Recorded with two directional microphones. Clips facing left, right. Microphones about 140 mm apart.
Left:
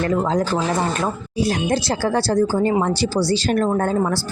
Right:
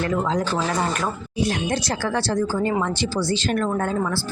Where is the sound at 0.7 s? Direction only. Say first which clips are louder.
Left 3 dB; 25° left (ahead or behind).